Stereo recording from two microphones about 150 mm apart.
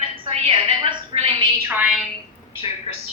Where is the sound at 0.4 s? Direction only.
35° right (ahead or behind).